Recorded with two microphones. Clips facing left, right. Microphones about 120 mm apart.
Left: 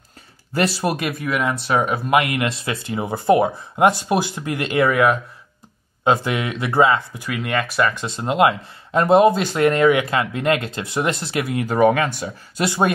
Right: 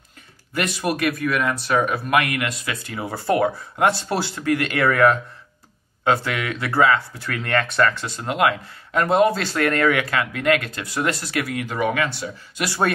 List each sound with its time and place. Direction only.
0.5 s speech: 30° left (ahead or behind)
11.6 s speech: 40° left (ahead or behind)
12.5 s speech: 20° left (ahead or behind)